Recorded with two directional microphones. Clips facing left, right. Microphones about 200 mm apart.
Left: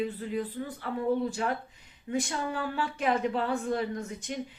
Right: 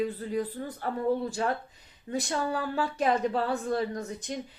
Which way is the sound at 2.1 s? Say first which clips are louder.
Right 1 dB; 35° right (ahead or behind).